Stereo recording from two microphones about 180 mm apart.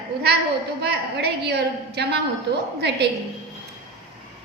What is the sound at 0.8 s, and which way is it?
A woman's voice, 60° right (ahead or behind).